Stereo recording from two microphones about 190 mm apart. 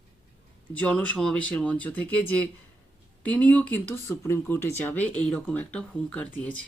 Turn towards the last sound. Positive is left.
turn(degrees=5)  # may be behind; listen again after turning